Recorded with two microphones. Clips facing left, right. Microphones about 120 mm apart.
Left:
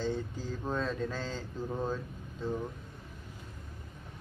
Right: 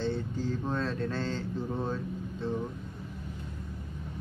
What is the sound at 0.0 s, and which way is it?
Mantra, 5° left (ahead or behind).